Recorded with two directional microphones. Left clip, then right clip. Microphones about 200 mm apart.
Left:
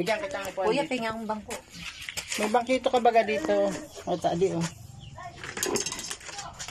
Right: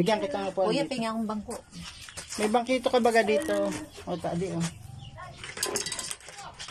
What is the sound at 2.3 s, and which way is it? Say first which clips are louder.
Speech: left 1 dB; centre (ahead or behind).